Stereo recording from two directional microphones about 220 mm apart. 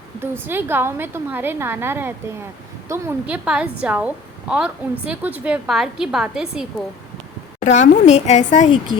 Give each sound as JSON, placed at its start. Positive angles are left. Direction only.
{"t": 0.2, "sound": "a woman's voice", "side_deg": -10}
{"t": 7.6, "sound": "speech", "side_deg": 30}